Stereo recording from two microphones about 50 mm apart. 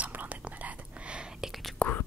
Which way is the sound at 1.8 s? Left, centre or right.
Centre.